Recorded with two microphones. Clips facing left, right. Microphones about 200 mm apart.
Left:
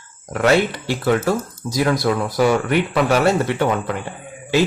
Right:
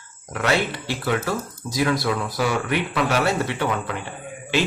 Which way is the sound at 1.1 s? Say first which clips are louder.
Left 6 dB; 40° left (ahead or behind).